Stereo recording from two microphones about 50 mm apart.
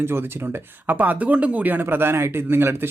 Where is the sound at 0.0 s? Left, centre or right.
Right.